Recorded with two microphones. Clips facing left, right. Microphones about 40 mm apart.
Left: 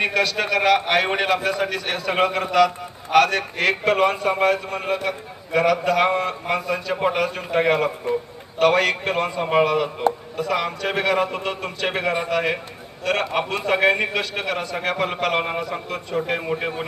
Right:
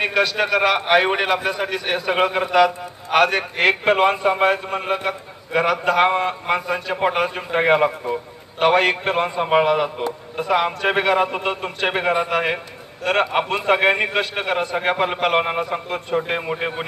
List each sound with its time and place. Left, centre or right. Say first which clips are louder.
0.0 s a man's voice: right 2 dB; centre
12.3 s a man's voice: right 1 dB; right